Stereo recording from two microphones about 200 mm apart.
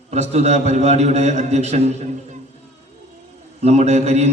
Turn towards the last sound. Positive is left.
turn(degrees=-35)  # may be behind; listen again after turning